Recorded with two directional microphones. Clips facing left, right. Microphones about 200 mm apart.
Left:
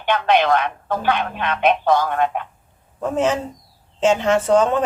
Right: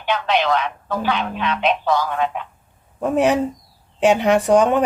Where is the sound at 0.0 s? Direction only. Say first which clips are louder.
Left 3 dB; 55° left (ahead or behind).